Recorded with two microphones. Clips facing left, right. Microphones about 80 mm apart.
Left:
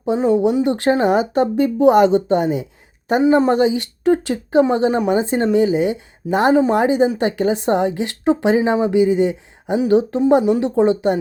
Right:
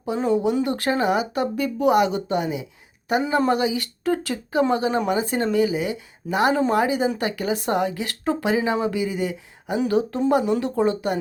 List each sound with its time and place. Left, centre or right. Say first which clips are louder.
0.0 s a woman's voice: left 6 dB; left